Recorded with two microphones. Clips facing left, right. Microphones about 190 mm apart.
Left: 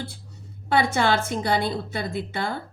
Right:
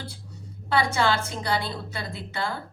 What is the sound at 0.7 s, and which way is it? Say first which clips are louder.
A woman's voice: left 2 dB; 55° left (ahead or behind).